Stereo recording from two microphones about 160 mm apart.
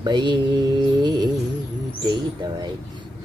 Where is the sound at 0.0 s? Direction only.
30° right (ahead or behind).